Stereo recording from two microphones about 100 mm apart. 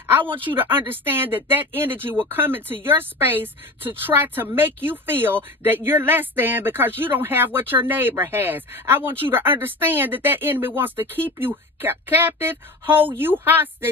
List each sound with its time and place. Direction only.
0.2 s a woman's voice: 55° right (ahead or behind)
0.5 s speech: 20° right (ahead or behind)